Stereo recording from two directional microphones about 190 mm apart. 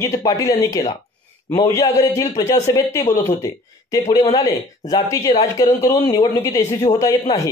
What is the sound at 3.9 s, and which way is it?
Speech, 20° left (ahead or behind).